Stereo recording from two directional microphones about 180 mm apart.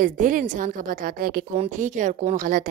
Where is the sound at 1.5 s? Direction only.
45° right (ahead or behind).